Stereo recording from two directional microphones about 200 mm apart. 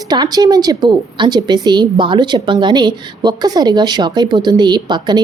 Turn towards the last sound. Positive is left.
turn(degrees=-20)  # may be behind; listen again after turning